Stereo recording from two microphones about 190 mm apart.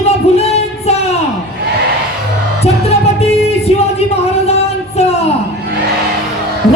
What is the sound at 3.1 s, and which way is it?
Music, 35° left (ahead or behind).